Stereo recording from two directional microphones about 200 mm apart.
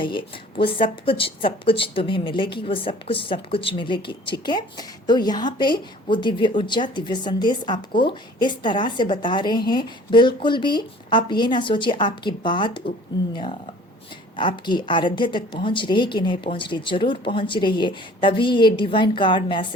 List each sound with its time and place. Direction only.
0.0 s speech: 25° left (ahead or behind)